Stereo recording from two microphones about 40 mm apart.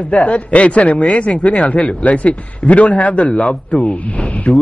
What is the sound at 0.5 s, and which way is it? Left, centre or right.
Speech, left.